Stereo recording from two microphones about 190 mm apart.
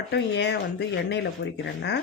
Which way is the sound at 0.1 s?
60° left (ahead or behind).